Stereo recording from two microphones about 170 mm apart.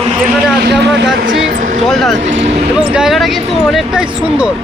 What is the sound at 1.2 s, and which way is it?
Vehicle, 50° right (ahead or behind).